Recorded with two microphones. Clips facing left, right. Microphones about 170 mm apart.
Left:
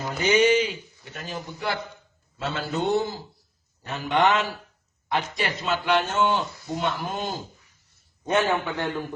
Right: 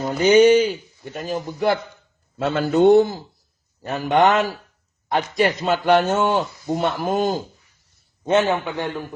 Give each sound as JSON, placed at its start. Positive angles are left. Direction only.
{"t": 0.2, "sound": "a man's voice", "side_deg": -40}
{"t": 8.2, "sound": "a man's voice", "side_deg": -25}